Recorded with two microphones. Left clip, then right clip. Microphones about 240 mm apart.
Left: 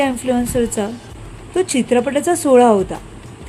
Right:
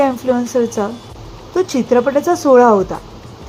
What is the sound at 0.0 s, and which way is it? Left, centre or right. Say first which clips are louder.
A woman's voice: right 3 dB; centre.